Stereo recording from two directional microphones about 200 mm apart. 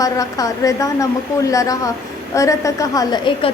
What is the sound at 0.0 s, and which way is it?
A woman's voice, 15° left (ahead or behind).